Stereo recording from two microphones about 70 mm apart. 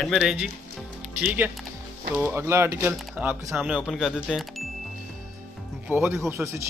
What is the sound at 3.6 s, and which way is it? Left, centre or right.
Speech, centre.